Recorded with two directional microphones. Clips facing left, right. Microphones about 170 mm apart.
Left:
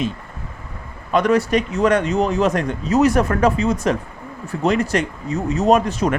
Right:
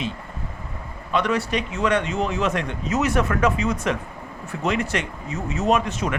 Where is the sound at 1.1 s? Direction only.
45° left (ahead or behind).